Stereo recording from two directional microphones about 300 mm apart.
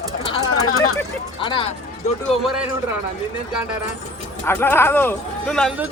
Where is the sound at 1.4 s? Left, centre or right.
Centre.